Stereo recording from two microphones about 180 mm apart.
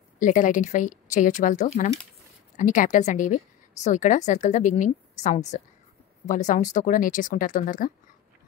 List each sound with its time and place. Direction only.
0.2 s a woman's voice: 45° left (ahead or behind)